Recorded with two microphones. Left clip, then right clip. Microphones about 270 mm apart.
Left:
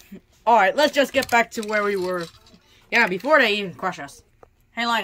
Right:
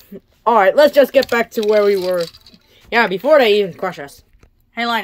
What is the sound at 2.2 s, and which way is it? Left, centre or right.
Speech, right.